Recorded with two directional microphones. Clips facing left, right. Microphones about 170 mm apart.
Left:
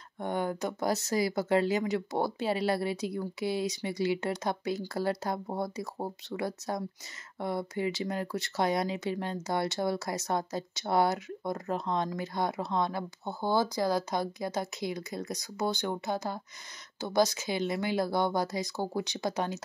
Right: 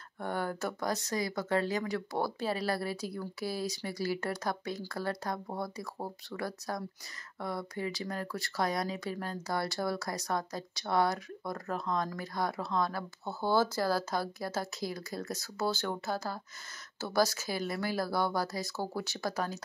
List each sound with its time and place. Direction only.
0.2 s speech: 20° left (ahead or behind)